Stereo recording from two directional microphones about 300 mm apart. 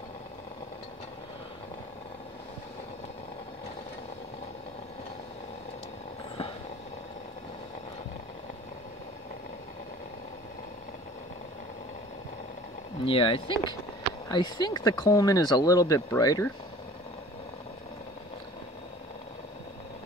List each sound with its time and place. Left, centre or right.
13.0 s speech: centre